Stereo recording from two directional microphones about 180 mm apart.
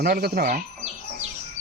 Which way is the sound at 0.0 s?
60° right (ahead or behind).